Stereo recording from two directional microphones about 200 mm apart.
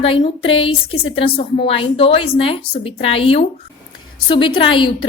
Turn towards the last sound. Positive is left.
turn(degrees=25)  # may be behind; listen again after turning